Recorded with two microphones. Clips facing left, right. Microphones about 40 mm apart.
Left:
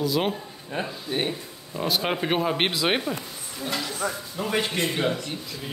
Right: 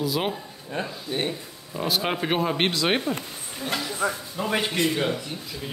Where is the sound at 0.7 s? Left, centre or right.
Centre.